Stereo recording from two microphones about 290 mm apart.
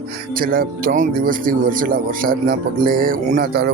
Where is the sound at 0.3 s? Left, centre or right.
Right.